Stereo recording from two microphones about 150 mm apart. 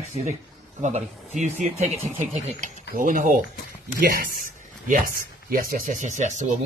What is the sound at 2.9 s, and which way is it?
Speech, 65° right (ahead or behind).